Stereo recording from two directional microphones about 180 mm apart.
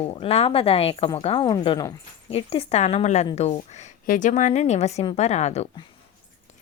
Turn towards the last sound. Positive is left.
turn(degrees=35)  # may be behind; listen again after turning